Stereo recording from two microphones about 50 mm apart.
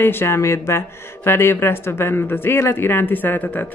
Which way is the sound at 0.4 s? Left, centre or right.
Left.